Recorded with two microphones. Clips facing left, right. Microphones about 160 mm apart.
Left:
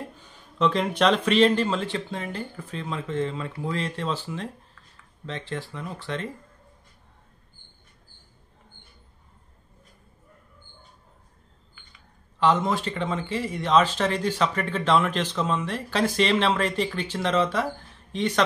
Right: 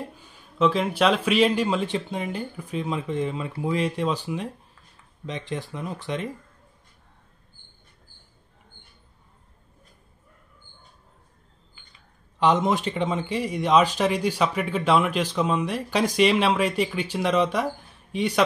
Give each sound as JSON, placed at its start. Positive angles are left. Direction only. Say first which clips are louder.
{"t": 0.6, "sound": "speech", "louder": "right 1 dB", "side_deg": -5}
{"t": 12.4, "sound": "speech", "louder": "right 1 dB", "side_deg": -20}